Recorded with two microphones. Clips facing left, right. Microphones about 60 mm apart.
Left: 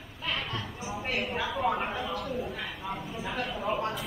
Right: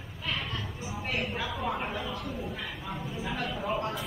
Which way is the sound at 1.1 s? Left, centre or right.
Centre.